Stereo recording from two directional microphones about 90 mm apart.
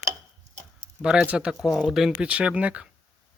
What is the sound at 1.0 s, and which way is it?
Speech, 10° right (ahead or behind).